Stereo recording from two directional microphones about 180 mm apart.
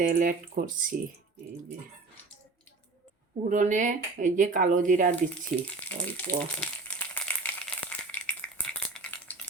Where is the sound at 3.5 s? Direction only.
45° right (ahead or behind).